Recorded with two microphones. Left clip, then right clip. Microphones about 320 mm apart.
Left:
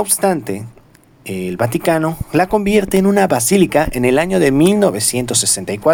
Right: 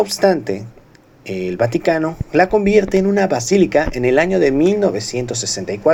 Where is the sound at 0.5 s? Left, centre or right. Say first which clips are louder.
Right 1 dB; left.